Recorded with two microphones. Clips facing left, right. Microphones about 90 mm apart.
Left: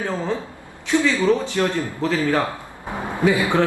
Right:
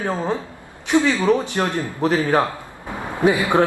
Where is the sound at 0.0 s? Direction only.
20° right (ahead or behind).